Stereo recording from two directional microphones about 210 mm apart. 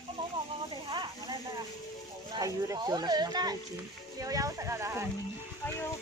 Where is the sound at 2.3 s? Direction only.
20° right (ahead or behind).